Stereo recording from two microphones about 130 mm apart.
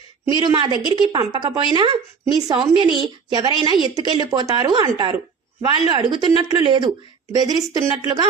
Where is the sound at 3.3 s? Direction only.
35° right (ahead or behind).